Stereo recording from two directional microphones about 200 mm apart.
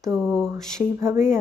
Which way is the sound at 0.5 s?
15° right (ahead or behind).